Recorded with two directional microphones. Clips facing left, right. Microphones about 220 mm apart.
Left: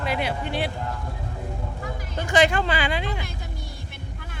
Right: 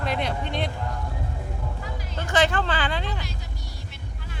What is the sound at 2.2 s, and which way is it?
Speech, 15° left (ahead or behind).